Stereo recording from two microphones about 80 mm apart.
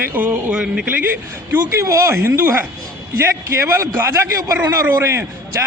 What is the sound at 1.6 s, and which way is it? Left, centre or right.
Speech, right.